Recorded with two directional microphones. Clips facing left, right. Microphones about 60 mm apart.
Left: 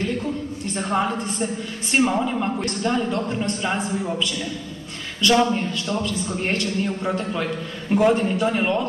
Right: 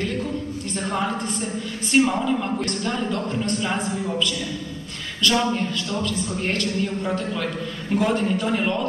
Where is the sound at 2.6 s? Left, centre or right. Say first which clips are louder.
Left 2 dB; left.